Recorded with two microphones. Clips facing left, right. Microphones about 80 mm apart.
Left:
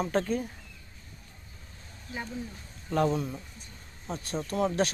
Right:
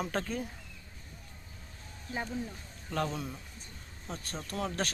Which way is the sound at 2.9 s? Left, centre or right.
Centre.